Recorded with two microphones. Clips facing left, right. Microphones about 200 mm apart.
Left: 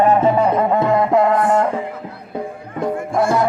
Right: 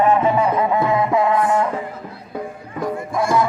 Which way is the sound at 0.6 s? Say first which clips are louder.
Left 2 dB; 50° left (ahead or behind).